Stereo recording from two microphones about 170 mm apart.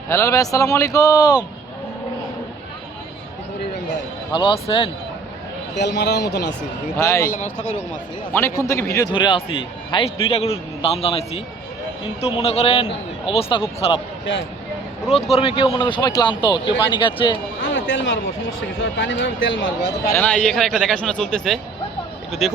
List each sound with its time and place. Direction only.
0.1 s a man's voice: 15° left (ahead or behind)
4.3 s a man's voice: 25° left (ahead or behind)
5.7 s a man's voice: 85° left
6.9 s a man's voice: 15° left (ahead or behind)
7.3 s speech: 50° left (ahead or behind)
8.3 s a man's voice: 15° left (ahead or behind)
9.1 s a man's voice: 30° left (ahead or behind)
15.4 s a man's voice: 35° left (ahead or behind)
17.6 s speech: 90° left
20.1 s a man's voice: 5° left (ahead or behind)